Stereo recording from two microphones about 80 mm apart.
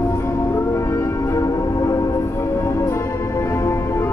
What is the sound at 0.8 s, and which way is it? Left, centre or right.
Music, left.